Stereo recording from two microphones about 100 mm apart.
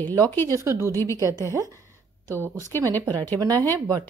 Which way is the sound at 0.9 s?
25° left (ahead or behind).